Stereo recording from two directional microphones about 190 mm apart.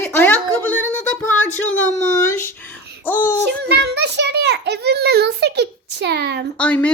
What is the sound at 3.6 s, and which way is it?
A child's voice, 60° right (ahead or behind).